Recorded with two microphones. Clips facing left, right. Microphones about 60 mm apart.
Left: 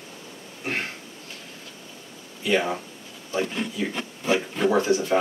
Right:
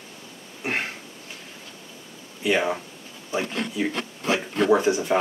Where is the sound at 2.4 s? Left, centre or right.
Right.